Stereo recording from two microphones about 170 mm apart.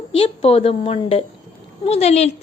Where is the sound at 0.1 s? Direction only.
35° left (ahead or behind).